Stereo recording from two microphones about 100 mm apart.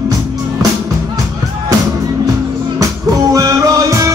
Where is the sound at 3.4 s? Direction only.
35° right (ahead or behind).